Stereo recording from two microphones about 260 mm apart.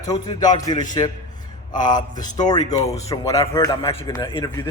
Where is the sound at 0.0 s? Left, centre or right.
Centre.